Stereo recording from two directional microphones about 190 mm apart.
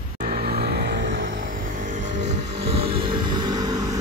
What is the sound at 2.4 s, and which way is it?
Vehicle, 60° right (ahead or behind).